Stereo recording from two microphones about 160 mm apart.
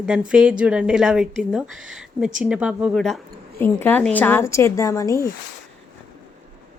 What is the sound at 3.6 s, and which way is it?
A woman's voice, 10° left (ahead or behind).